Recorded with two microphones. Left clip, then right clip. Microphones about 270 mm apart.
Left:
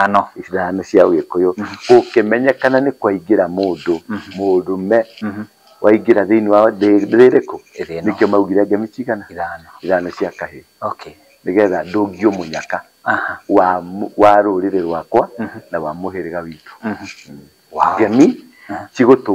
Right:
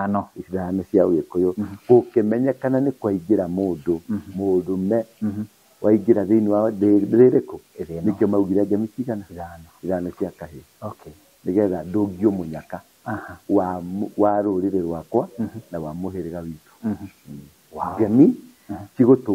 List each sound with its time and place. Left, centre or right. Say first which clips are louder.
0.0 s speech: left 12 dB; centre
3.5 s speech: left 7 dB; left
3.8 s speech: left 5 dB; centre
14.0 s speech: left 9 dB; left
14.3 s speech: left 9 dB; centre